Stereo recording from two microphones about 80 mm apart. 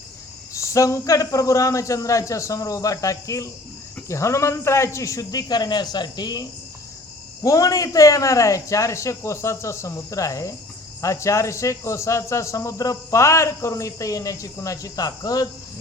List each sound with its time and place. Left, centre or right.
0.5 s a man's voice: left